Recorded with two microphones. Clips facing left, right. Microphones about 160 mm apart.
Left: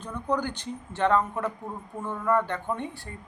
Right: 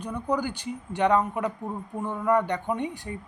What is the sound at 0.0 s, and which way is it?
A woman's voice, 10° right (ahead or behind).